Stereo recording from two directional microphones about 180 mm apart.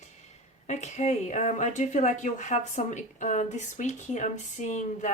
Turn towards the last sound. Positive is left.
turn(degrees=40)  # may be behind; listen again after turning